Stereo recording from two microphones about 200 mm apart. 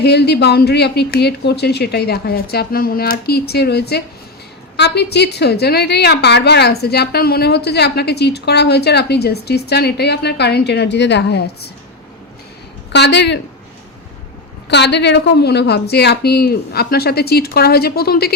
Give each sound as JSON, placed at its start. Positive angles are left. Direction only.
{"t": 0.0, "sound": "a woman's voice", "side_deg": 55}
{"t": 12.9, "sound": "a woman's voice", "side_deg": 60}
{"t": 14.7, "sound": "speech", "side_deg": 60}